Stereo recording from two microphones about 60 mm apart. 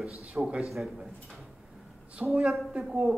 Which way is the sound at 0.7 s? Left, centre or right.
Centre.